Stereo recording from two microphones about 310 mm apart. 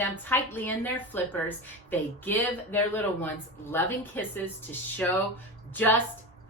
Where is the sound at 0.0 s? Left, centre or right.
Centre.